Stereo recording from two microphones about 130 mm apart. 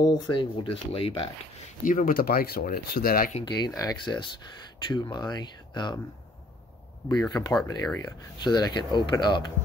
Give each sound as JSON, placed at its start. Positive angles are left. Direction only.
{"t": 0.0, "sound": "speech", "side_deg": 30}
{"t": 0.7, "sound": "speech", "side_deg": 50}
{"t": 1.9, "sound": "speech", "side_deg": 90}
{"t": 3.4, "sound": "speech", "side_deg": 35}
{"t": 7.2, "sound": "speech", "side_deg": 30}